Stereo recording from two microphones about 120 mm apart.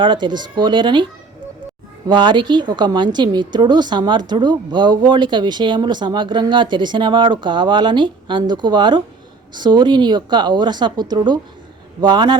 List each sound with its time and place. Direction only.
0.0 s a woman's voice: 40° right (ahead or behind)
2.0 s a woman's voice: 40° right (ahead or behind)